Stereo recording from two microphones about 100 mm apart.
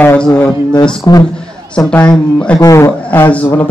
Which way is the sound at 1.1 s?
40° left (ahead or behind).